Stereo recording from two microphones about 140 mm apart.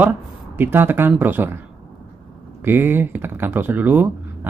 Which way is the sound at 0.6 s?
15° right (ahead or behind).